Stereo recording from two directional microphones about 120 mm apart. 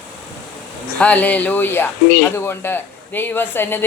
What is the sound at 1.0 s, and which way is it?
Speech, 15° left (ahead or behind).